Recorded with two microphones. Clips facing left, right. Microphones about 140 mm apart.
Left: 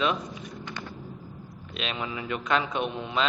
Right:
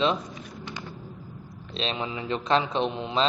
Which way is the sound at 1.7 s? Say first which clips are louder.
Right 3 dB; 30° right (ahead or behind).